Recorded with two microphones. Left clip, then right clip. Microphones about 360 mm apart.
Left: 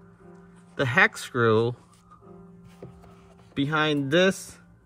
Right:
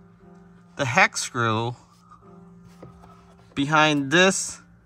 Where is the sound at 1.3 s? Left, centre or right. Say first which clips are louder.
Left 3 dB; centre.